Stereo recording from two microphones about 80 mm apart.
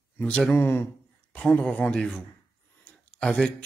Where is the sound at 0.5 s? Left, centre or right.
Left.